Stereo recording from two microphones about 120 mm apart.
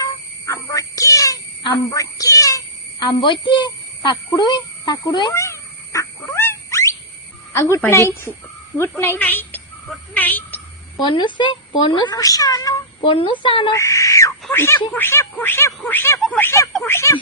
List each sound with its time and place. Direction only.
0.0 s a sound: 25° left (ahead or behind)
5.3 s dog: 25° left (ahead or behind)
7.8 s speech: 20° left (ahead or behind)
10.9 s speech: 40° left (ahead or behind)
13.0 s speech: 45° left (ahead or behind)
13.7 s a sound: 25° left (ahead or behind)
14.5 s speech: 20° left (ahead or behind)